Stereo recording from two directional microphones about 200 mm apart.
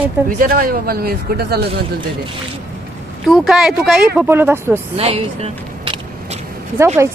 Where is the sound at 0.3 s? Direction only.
45° right (ahead or behind).